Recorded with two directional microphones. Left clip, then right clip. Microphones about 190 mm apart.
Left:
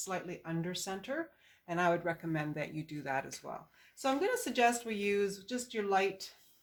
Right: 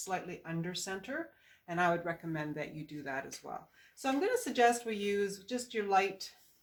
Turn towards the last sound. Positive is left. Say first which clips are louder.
# right 2 dB
turn(degrees=25)  # may be behind; listen again after turning